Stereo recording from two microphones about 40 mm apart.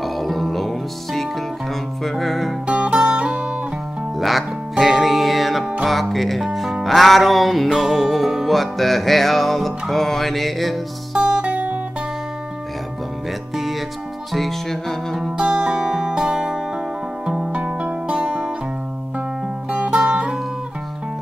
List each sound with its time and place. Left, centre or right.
0.0 s music: centre
2.6 s music: right
4.2 s music: centre
11.1 s music: centre
11.4 s music: right
13.6 s music: centre
15.3 s music: centre
17.5 s music: right
19.7 s music: right